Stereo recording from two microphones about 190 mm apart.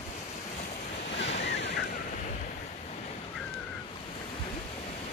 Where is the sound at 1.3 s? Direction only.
70° left (ahead or behind).